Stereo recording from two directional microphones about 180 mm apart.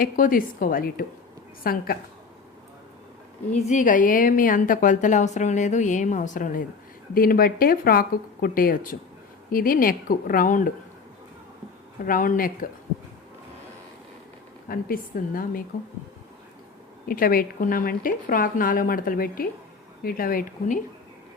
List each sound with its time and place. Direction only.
0.0 s a woman's voice: 50° left (ahead or behind)
3.5 s a woman's voice: 45° left (ahead or behind)
12.0 s a woman's voice: 50° left (ahead or behind)
14.7 s a woman's voice: 55° left (ahead or behind)
17.1 s a woman's voice: 55° left (ahead or behind)